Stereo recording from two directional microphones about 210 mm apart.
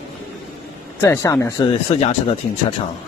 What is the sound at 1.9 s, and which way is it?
Speech, 30° left (ahead or behind).